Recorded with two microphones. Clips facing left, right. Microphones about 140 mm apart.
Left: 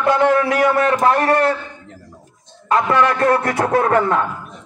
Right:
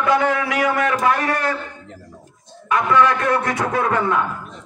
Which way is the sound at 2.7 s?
35° left (ahead or behind).